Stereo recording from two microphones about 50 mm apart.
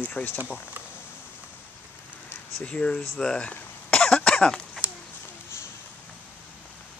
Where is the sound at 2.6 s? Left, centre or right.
Left.